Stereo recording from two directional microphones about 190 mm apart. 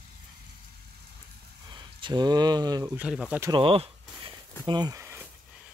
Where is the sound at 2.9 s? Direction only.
5° right (ahead or behind).